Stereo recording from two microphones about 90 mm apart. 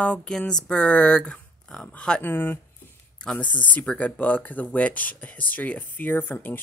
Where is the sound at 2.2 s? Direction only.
20° left (ahead or behind).